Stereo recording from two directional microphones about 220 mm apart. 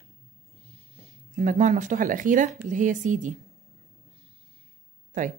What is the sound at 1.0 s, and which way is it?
Speech, 30° right (ahead or behind).